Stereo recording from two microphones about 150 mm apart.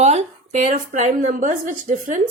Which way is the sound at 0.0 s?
50° right (ahead or behind).